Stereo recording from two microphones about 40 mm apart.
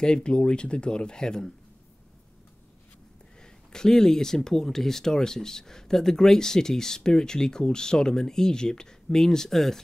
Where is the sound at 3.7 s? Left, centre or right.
Centre.